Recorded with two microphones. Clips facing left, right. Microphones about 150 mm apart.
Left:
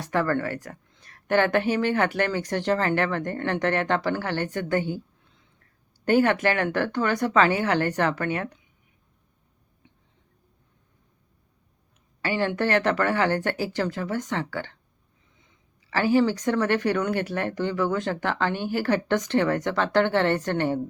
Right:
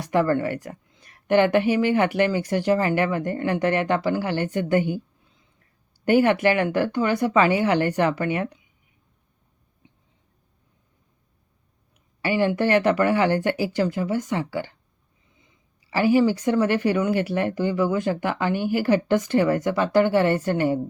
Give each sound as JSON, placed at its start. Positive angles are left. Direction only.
{"t": 0.0, "sound": "speech", "side_deg": -15}
{"t": 12.2, "sound": "speech", "side_deg": -15}